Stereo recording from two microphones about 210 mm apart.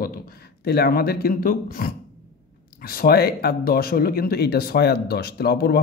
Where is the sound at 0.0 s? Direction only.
45° left (ahead or behind).